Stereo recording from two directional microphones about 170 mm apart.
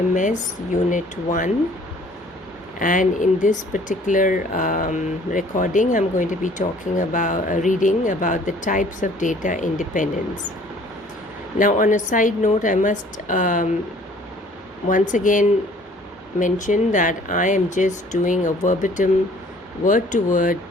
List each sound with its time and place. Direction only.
0.1 s speech: 50° left (ahead or behind)
2.7 s speech: 50° left (ahead or behind)
11.5 s speech: 50° left (ahead or behind)
14.8 s speech: 50° left (ahead or behind)